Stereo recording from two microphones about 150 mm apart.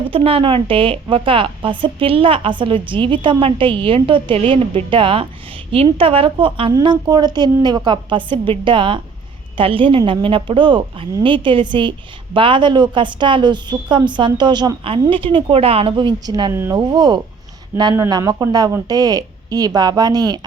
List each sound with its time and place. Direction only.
0.1 s a woman's voice: 35° right (ahead or behind)